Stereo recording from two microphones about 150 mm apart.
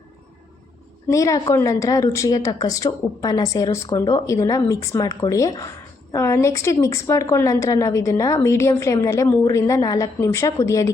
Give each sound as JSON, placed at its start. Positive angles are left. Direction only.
{"t": 1.1, "sound": "a woman's voice", "side_deg": 20}